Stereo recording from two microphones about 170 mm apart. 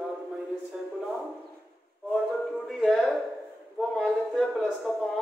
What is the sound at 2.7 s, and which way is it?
Music, centre (ahead or behind).